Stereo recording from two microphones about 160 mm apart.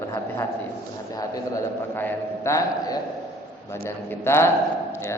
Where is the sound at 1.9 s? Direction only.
15° left (ahead or behind).